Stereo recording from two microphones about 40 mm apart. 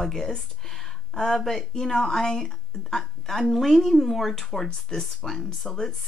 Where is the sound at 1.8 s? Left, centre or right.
Centre.